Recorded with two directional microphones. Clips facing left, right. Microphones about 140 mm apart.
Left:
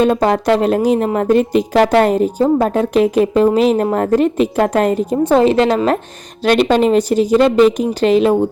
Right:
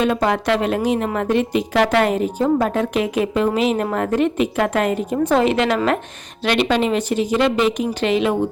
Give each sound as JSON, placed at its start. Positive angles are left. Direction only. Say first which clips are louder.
{"t": 0.0, "sound": "a woman's voice", "louder": "left 5 dB", "side_deg": 40}